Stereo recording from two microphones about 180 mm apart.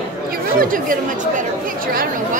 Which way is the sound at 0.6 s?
50° right (ahead or behind).